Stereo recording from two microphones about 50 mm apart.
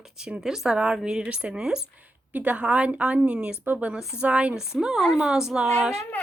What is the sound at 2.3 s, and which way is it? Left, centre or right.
A woman's voice, right.